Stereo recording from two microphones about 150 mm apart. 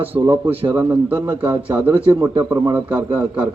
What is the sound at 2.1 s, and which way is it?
A man's voice, 25° right (ahead or behind).